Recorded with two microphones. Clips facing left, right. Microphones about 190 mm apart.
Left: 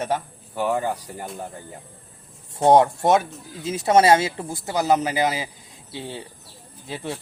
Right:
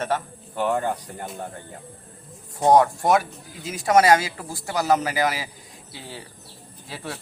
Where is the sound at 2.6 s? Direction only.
25° left (ahead or behind).